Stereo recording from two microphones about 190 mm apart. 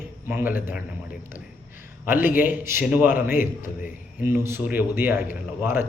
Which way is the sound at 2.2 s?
45° left (ahead or behind).